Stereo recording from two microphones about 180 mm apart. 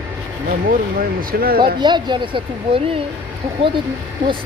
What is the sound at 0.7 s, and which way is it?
Speech, 55° right (ahead or behind).